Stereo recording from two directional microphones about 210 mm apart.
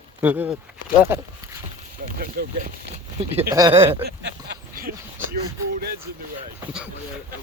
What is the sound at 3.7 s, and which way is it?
Speech, 25° right (ahead or behind).